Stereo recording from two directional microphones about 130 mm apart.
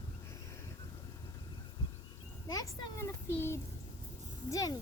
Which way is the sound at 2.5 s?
30° left (ahead or behind).